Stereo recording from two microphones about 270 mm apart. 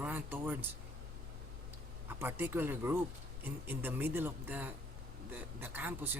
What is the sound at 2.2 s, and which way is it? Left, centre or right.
Speech, centre.